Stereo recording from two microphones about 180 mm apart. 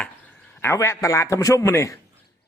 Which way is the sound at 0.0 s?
5° left (ahead or behind).